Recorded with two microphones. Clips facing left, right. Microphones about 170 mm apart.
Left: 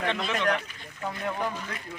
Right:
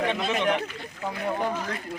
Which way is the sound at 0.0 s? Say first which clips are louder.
Right 3 dB; 15° right (ahead or behind).